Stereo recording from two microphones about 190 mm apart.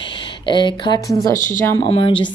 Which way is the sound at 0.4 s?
25° left (ahead or behind).